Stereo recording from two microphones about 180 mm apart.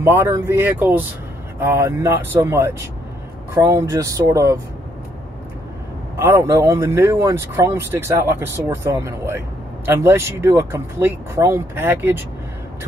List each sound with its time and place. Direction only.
0.0 s speech: 15° right (ahead or behind)
6.1 s speech: 15° right (ahead or behind)